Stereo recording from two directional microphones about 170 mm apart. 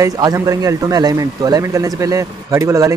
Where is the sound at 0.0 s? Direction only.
20° right (ahead or behind).